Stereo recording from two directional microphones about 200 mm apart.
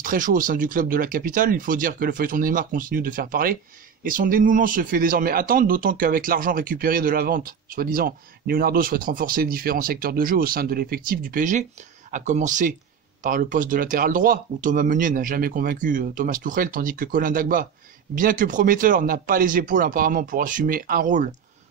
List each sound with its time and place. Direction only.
0.0 s speech: 45° right (ahead or behind)